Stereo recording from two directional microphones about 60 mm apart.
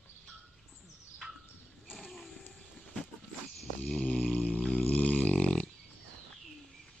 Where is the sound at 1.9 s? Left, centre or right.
Centre.